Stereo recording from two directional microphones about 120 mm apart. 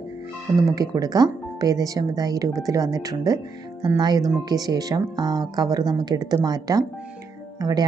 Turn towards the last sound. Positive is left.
turn(degrees=-30)  # may be behind; listen again after turning